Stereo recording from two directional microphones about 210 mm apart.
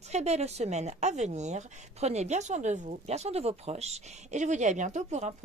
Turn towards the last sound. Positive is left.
turn(degrees=-35)  # may be behind; listen again after turning